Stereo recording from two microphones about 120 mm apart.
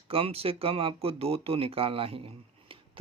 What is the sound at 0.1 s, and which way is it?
Speech, 55° right (ahead or behind).